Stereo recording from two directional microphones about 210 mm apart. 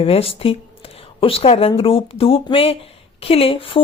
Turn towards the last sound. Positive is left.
turn(degrees=25)  # may be behind; listen again after turning